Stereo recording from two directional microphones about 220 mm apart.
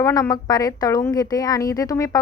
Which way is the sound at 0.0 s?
15° left (ahead or behind).